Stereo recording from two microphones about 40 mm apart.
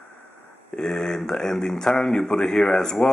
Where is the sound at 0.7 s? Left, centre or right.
Centre.